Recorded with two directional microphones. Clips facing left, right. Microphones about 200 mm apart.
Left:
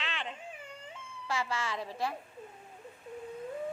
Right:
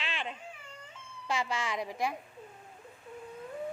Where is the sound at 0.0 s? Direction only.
15° right (ahead or behind).